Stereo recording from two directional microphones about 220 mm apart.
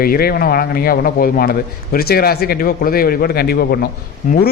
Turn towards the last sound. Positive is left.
turn(degrees=35)  # may be behind; listen again after turning